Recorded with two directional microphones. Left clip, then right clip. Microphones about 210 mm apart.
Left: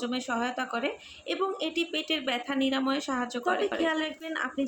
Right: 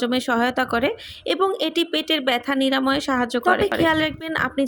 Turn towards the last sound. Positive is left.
turn(degrees=-40)  # may be behind; listen again after turning